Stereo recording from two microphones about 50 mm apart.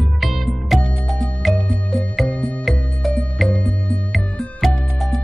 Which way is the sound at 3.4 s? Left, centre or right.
Left.